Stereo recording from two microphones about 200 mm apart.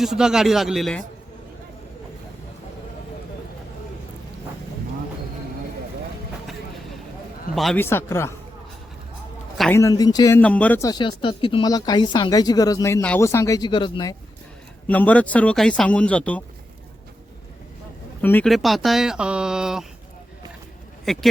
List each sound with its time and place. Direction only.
0.0 s speech: centre (ahead or behind)
7.5 s a man's voice: centre (ahead or behind)
7.8 s a man's voice: 10° left (ahead or behind)
9.7 s speech: 15° left (ahead or behind)
14.8 s a man's voice: 10° left (ahead or behind)
18.2 s speech: 10° left (ahead or behind)
21.0 s speech: centre (ahead or behind)